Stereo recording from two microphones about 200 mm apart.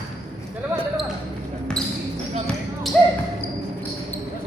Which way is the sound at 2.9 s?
5° left (ahead or behind).